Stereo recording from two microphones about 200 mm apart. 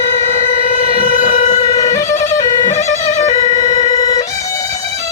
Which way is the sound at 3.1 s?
35° left (ahead or behind).